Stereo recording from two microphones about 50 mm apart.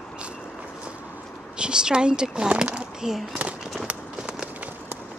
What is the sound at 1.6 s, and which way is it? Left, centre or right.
A woman's voice, centre.